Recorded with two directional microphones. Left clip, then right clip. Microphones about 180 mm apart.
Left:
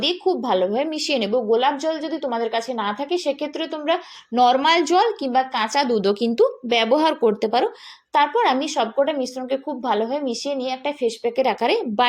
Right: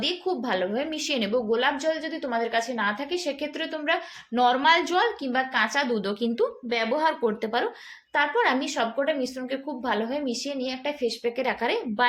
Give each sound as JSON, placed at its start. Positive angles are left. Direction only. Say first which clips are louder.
{"t": 0.0, "sound": "a woman's voice", "louder": "left 6 dB", "side_deg": 30}